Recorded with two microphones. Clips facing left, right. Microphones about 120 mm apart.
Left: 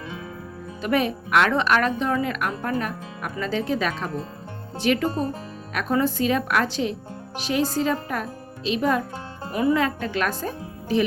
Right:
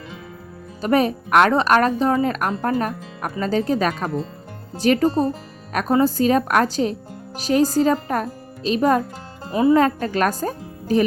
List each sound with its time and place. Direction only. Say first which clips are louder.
0.8 s speech: right 5 dB; 40° right (ahead or behind)
9.5 s speech: right 5 dB; 25° right (ahead or behind)
9.7 s speech: right 6 dB; 40° right (ahead or behind)